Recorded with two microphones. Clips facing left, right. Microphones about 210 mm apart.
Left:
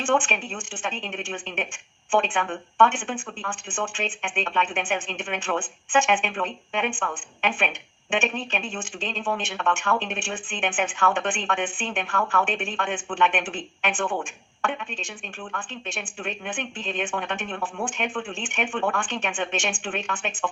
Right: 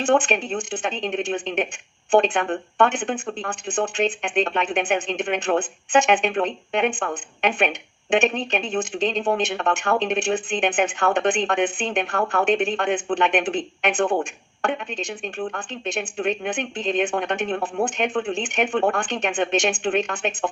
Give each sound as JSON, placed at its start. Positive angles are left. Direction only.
{"t": 0.0, "sound": "speech", "side_deg": -40}